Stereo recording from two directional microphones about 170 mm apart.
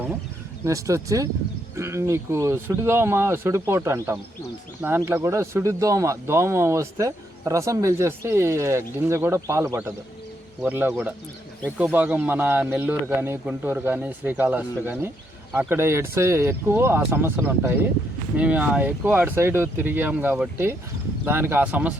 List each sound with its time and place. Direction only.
0.6 s speech: 20° right (ahead or behind)